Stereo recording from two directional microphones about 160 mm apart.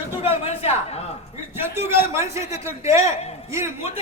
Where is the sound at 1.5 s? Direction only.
15° right (ahead or behind).